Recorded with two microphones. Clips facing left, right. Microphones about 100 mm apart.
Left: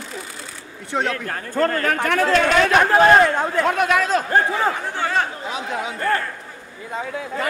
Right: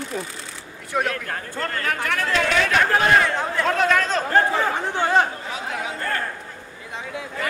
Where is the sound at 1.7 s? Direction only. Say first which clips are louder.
Left 5 dB; 45° left (ahead or behind).